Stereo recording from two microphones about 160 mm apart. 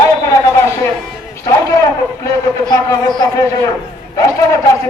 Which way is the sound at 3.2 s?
20° left (ahead or behind).